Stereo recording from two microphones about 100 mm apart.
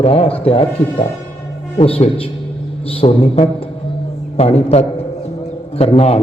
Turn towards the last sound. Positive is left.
turn(degrees=90)